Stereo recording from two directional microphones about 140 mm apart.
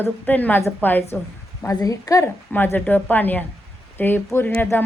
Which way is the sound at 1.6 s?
25° left (ahead or behind).